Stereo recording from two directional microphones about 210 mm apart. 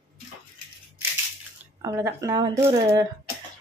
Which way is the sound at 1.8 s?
15° right (ahead or behind).